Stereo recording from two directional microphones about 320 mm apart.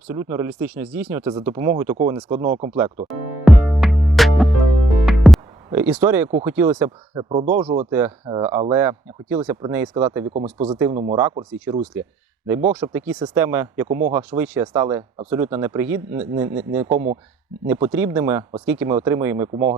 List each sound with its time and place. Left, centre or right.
0.1 s speech: centre
2.7 s music: centre
6.1 s speech: centre
13.8 s speech: right
14.1 s speech: centre